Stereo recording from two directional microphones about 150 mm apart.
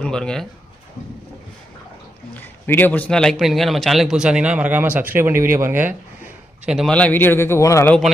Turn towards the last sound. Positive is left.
turn(degrees=20)  # may be behind; listen again after turning